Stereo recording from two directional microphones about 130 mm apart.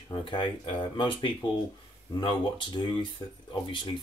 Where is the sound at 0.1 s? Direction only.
40° left (ahead or behind).